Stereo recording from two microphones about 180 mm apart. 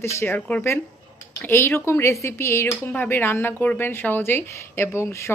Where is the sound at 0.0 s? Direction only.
15° left (ahead or behind).